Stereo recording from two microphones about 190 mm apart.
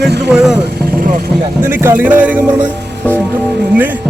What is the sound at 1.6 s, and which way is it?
Music, 10° right (ahead or behind).